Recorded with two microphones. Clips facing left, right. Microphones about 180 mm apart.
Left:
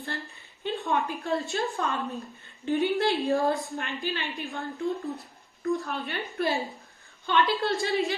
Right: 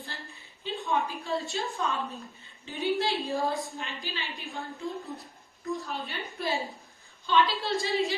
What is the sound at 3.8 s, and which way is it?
Speech, 60° left (ahead or behind).